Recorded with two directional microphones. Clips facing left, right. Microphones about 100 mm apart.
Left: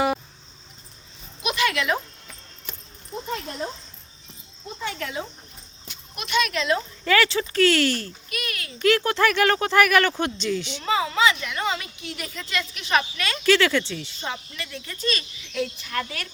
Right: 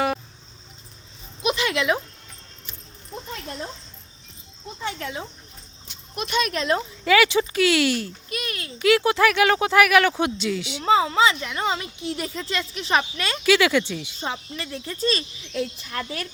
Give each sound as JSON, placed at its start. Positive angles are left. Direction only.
{"t": 1.4, "sound": "a sound", "side_deg": -25}
{"t": 4.8, "sound": "a woman's voice", "side_deg": -25}
{"t": 6.1, "sound": "speech", "side_deg": -35}
{"t": 7.0, "sound": "speech", "side_deg": -10}
{"t": 8.3, "sound": "a sound", "side_deg": -25}
{"t": 8.8, "sound": "speech", "side_deg": -5}
{"t": 10.8, "sound": "a woman's voice", "side_deg": -25}
{"t": 13.4, "sound": "speech", "side_deg": -10}
{"t": 14.3, "sound": "a woman's voice", "side_deg": -30}
{"t": 15.9, "sound": "a woman's voice", "side_deg": -20}